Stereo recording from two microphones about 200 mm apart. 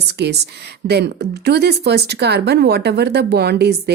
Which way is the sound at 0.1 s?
55° right (ahead or behind).